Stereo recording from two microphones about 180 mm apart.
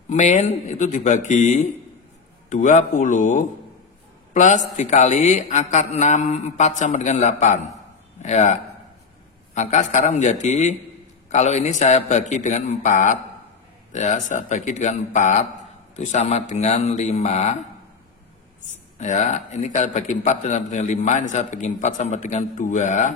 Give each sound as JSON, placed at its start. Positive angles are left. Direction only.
{"t": 0.1, "sound": "a man's voice", "side_deg": 40}
{"t": 18.7, "sound": "a man's voice", "side_deg": 40}